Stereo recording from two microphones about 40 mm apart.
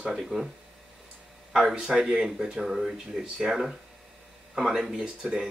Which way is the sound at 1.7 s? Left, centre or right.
Centre.